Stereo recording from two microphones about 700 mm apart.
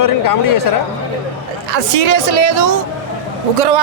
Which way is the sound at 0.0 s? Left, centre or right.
Left.